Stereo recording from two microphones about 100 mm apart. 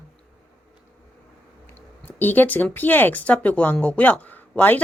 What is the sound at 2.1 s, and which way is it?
Speech, 20° left (ahead or behind).